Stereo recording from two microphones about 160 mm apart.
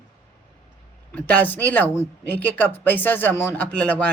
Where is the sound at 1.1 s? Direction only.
10° left (ahead or behind).